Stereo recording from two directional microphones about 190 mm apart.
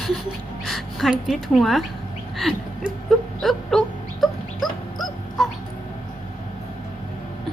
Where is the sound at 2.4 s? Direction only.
Centre (ahead or behind).